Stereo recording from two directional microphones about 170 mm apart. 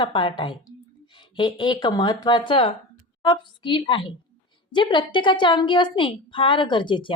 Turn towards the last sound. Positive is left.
turn(degrees=30)  # may be behind; listen again after turning